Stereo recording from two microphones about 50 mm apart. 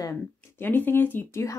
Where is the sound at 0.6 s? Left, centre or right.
Left.